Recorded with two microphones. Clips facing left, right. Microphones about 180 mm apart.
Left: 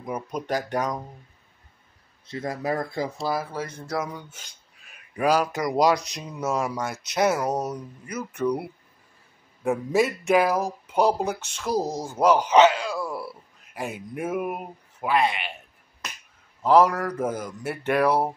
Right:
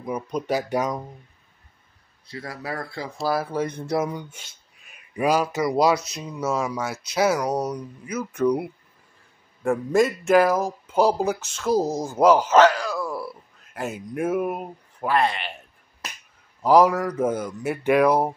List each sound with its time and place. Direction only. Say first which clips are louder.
0.0 s speech: right 3 dB; 5° left (ahead or behind)
0.5 s speech: right 2 dB; 5° right (ahead or behind)
2.2 s speech: left 5 dB; 20° left (ahead or behind)
3.3 s speech: right 5 dB; 20° right (ahead or behind)
5.1 s speech: right 1 dB; 10° right (ahead or behind)
9.6 s speech: right 2 dB; 5° left (ahead or behind)
12.4 s speech: right 1 dB; 20° left (ahead or behind)
13.7 s speech: right 3 dB; centre (ahead or behind)
16.6 s speech: right 2 dB; 10° right (ahead or behind)
17.2 s speech: right 4 dB; 5° left (ahead or behind)